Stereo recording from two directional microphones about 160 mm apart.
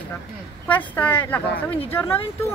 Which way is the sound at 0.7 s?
10° left (ahead or behind).